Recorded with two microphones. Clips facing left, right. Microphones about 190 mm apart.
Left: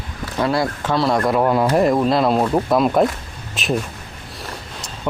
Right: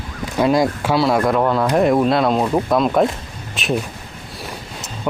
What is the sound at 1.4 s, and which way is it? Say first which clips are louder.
Speech: left 1 dB; 15° left (ahead or behind).